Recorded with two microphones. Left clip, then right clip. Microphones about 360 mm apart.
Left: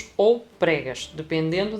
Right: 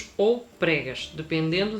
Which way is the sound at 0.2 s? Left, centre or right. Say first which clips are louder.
Left 4 dB; centre.